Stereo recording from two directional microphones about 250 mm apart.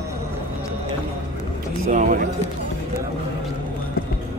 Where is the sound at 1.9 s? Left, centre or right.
Right.